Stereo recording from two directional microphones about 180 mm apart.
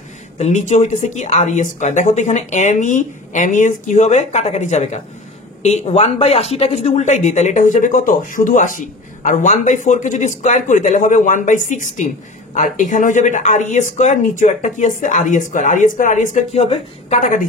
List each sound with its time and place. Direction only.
0.4 s speech: 40° left (ahead or behind)